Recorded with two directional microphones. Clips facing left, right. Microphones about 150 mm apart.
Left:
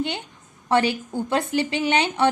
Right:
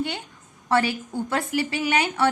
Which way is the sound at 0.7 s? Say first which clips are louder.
Left 2 dB; 20° left (ahead or behind).